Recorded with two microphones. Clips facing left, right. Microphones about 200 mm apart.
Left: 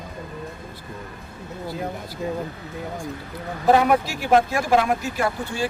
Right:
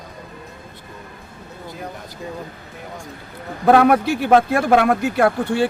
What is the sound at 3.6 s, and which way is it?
A man's voice, 60° right (ahead or behind).